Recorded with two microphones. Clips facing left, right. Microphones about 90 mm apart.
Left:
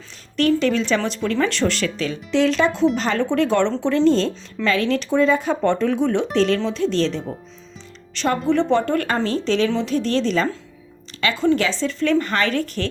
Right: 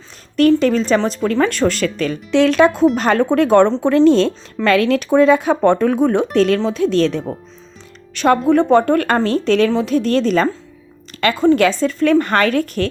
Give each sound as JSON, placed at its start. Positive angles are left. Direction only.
{"t": 0.3, "sound": "a woman's voice", "side_deg": -45}